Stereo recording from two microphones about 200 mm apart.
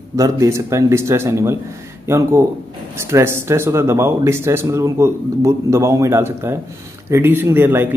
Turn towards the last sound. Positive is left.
turn(degrees=-10)  # may be behind; listen again after turning